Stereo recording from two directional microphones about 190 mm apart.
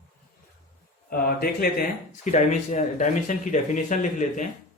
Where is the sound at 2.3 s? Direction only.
40° left (ahead or behind).